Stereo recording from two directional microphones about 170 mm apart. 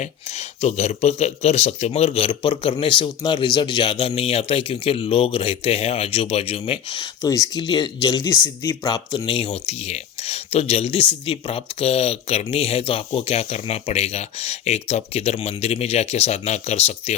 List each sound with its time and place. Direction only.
0.0 s speech: 40° left (ahead or behind)
7.2 s speech: 20° left (ahead or behind); by 17.2 s 40° left (ahead or behind)